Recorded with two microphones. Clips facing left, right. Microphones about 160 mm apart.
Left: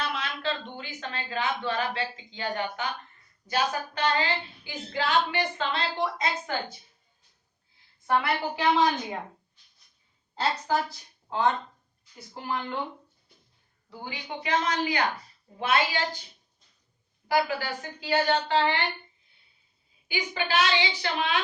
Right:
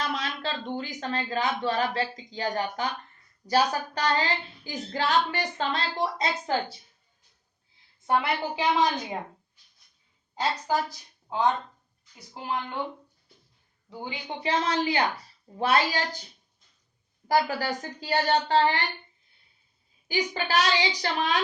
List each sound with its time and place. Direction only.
0.0 s a woman's voice: 40° right (ahead or behind)
8.0 s a woman's voice: 20° right (ahead or behind)
10.3 s a woman's voice: 15° right (ahead or behind)
14.0 s a woman's voice: 30° right (ahead or behind)
17.2 s a woman's voice: 40° right (ahead or behind)
20.1 s a woman's voice: 40° right (ahead or behind)